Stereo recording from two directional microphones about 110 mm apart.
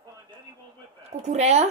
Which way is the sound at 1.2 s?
90° right.